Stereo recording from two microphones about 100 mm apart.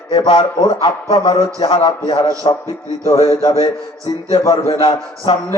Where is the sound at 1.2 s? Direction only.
70° left (ahead or behind).